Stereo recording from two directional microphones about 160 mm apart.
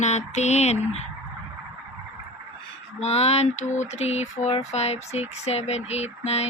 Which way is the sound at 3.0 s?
40° left (ahead or behind).